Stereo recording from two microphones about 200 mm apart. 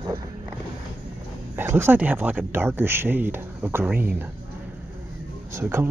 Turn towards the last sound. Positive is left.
turn(degrees=-10)  # may be behind; listen again after turning